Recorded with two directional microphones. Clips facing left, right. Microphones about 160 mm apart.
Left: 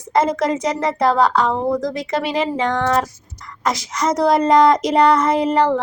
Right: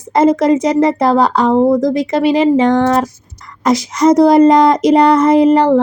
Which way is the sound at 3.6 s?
10° right (ahead or behind).